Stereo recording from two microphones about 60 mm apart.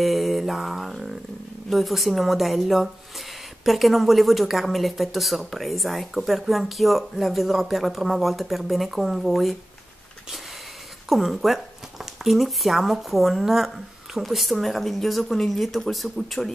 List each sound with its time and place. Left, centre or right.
0.0 s mantra: centre
1.7 s speech: centre
11.1 s speech: centre